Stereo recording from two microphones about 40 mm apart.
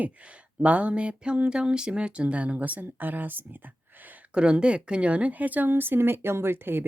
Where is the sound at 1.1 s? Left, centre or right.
Right.